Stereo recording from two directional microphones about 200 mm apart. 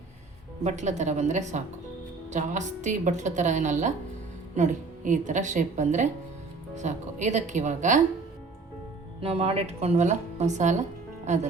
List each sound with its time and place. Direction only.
0.6 s a woman's voice: 35° right (ahead or behind)
9.2 s a woman's voice: 30° right (ahead or behind)